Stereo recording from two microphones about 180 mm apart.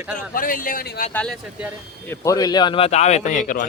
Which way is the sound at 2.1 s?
20° left (ahead or behind).